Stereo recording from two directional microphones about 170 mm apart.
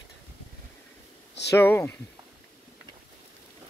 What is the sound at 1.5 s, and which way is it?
Speech, 15° left (ahead or behind).